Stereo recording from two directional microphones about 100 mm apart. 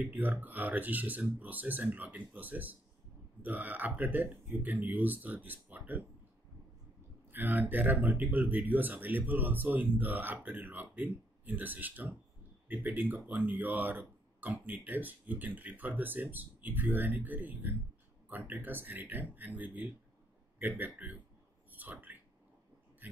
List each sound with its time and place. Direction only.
0.0 s speech: 15° right (ahead or behind)
7.2 s speech: 20° right (ahead or behind)